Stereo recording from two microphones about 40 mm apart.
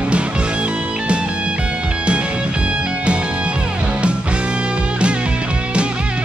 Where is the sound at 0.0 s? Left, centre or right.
Right.